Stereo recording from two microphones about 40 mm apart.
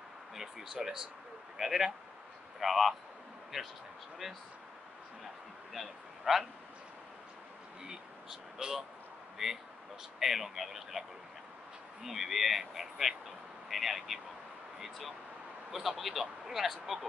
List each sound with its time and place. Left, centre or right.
0.4 s speech: centre
4.2 s speech: centre
5.7 s speech: centre
7.8 s speech: centre